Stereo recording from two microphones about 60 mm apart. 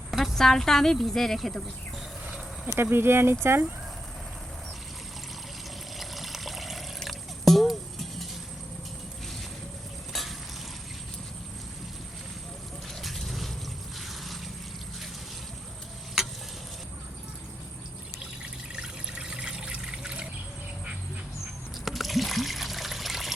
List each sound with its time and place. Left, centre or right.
0.1 s speech: centre
2.6 s speech: right
6.0 s water: centre
10.1 s a sound: centre
13.0 s mechanisms: centre
18.8 s water: centre
21.8 s trickle: centre